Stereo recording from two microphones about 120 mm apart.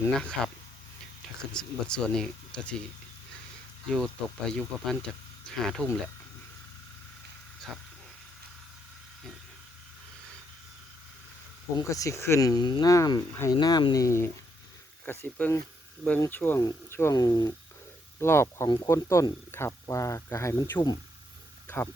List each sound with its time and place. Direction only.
0.2 s speech: 5° left (ahead or behind)
1.5 s speech: 5° left (ahead or behind)
3.8 s speech: 5° left (ahead or behind)
11.8 s speech: 25° left (ahead or behind)
13.5 s speech: 35° left (ahead or behind); by 20.8 s 20° left (ahead or behind)